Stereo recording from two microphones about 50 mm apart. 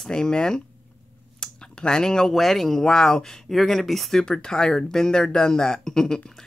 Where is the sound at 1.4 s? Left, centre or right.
Centre.